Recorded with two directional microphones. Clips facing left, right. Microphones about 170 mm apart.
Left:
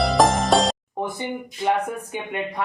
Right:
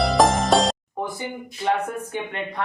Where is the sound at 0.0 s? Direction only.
Centre (ahead or behind).